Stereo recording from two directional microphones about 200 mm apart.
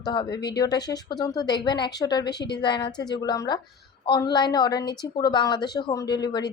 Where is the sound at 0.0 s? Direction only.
20° left (ahead or behind).